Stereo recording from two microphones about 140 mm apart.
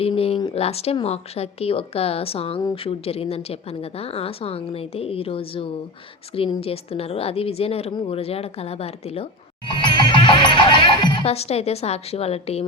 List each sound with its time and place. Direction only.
0.0 s a woman's voice: 45° left (ahead or behind)
9.6 s music: 35° left (ahead or behind)